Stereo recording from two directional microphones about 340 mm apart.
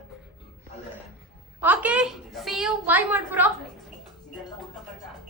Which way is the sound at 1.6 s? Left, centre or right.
Centre.